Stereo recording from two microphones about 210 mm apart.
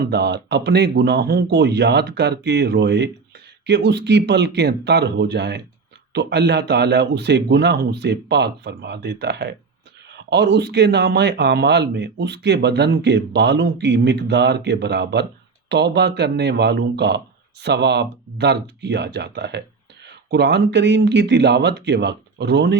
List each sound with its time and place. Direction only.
0.0 s speech: 55° right (ahead or behind)